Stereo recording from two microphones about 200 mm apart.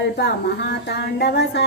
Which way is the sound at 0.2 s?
55° left (ahead or behind).